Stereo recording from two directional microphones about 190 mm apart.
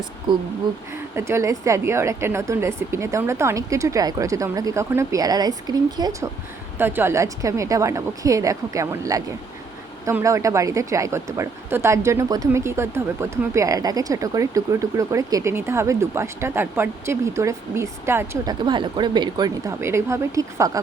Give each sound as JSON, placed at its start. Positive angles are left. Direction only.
{"t": 0.9, "sound": "speech", "side_deg": -15}
{"t": 18.6, "sound": "speech", "side_deg": -25}